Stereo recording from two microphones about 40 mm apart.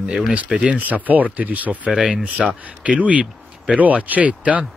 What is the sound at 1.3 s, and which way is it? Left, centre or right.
Speech, right.